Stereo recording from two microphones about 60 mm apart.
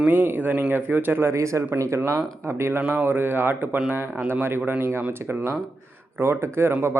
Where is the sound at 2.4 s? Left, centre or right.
Right.